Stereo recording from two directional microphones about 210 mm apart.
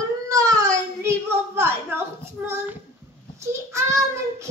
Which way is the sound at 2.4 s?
10° right (ahead or behind).